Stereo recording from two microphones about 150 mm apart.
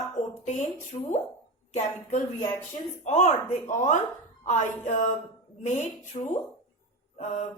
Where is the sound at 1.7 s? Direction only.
50° left (ahead or behind).